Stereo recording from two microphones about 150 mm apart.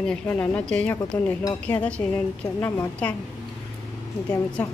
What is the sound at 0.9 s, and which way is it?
Speech, 25° left (ahead or behind).